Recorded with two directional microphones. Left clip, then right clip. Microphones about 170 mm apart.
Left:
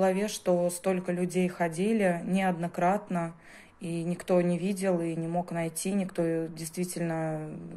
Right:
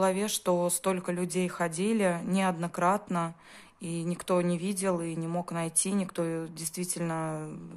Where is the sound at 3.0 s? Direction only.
40° right (ahead or behind).